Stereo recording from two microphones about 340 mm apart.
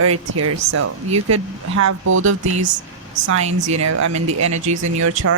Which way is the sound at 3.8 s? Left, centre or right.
Right.